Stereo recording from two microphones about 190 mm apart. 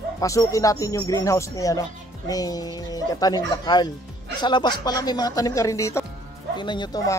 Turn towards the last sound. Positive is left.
turn(degrees=20)  # may be behind; listen again after turning